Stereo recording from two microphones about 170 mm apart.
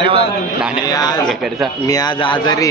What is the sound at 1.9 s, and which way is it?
Speech, 25° left (ahead or behind).